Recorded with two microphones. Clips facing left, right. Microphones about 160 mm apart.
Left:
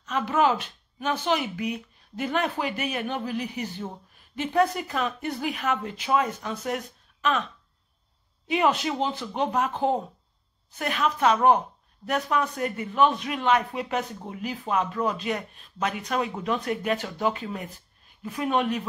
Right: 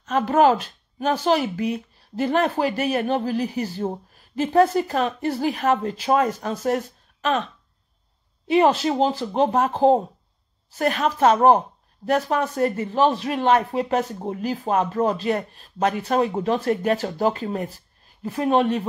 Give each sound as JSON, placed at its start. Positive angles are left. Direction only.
{"t": 0.1, "sound": "a woman's voice", "side_deg": -35}
{"t": 8.5, "sound": "speech", "side_deg": -35}